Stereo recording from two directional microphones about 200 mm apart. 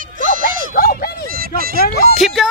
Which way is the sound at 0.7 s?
50° left (ahead or behind).